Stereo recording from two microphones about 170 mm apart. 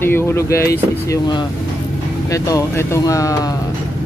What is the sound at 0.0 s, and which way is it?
Speech, 15° left (ahead or behind).